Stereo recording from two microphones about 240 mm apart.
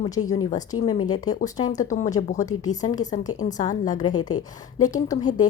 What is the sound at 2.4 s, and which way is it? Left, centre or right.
Speech, centre.